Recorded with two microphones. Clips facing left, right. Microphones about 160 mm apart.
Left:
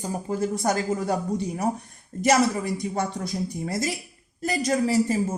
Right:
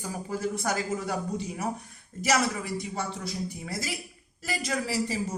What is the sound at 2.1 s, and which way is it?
A woman's voice, 55° left (ahead or behind).